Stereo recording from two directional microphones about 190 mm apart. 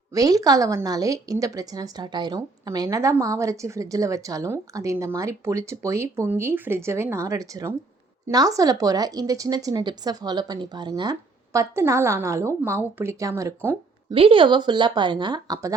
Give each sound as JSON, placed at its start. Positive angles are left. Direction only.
{"t": 0.1, "sound": "a woman's voice", "side_deg": -20}
{"t": 14.1, "sound": "speech", "side_deg": -30}